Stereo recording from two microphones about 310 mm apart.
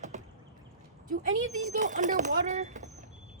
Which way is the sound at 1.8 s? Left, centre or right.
Right.